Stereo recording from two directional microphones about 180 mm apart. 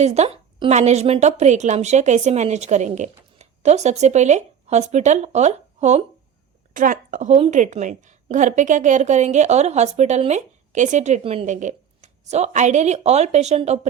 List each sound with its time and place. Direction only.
0.0 s a woman's voice: 35° right (ahead or behind)